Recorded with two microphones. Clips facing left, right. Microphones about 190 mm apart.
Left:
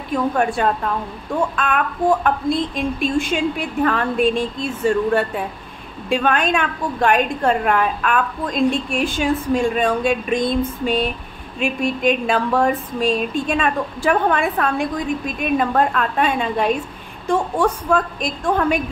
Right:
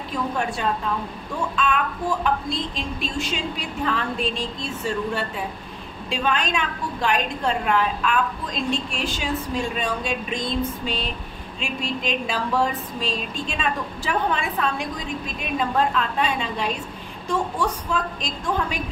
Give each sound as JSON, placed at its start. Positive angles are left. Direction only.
{"t": 0.1, "sound": "a woman's voice", "side_deg": 55}
{"t": 1.5, "sound": "a sound", "side_deg": 55}
{"t": 6.0, "sound": "a woman's voice", "side_deg": 55}